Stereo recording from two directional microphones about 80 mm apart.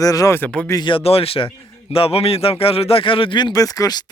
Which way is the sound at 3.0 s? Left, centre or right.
Left.